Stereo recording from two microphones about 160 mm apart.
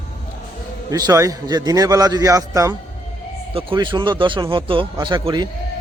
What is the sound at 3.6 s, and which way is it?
Speech, 30° right (ahead or behind).